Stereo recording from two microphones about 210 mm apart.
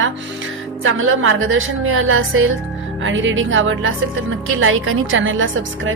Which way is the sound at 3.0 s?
65° right (ahead or behind).